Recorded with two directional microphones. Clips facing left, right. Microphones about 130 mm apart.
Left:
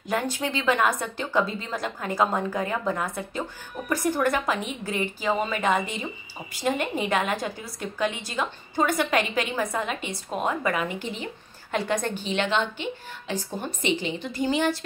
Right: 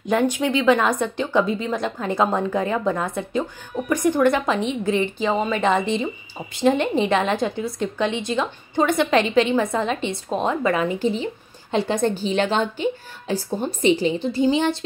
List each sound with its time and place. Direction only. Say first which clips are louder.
0.0 s a woman's voice: right 7 dB; 20° right (ahead or behind)